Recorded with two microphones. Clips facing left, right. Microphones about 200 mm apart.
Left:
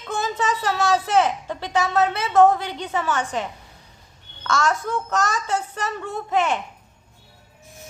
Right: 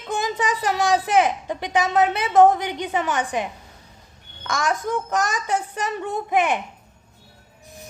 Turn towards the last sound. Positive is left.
turn(degrees=-15)  # may be behind; listen again after turning